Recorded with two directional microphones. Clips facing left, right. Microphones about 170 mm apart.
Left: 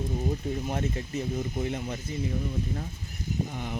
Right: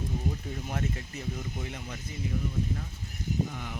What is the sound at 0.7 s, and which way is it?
Speech, 25° left (ahead or behind).